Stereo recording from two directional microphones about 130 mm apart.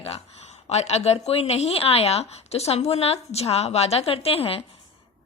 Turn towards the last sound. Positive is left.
turn(degrees=50)  # may be behind; listen again after turning